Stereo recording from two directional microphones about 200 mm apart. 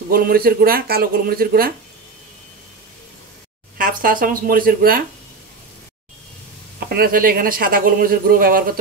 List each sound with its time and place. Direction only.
0.1 s speech: 50° right (ahead or behind)
3.7 s speech: 45° right (ahead or behind)
6.9 s speech: 45° right (ahead or behind)